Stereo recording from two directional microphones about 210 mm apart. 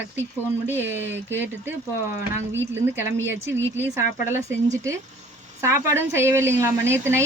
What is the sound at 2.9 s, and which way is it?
Speech, 10° right (ahead or behind).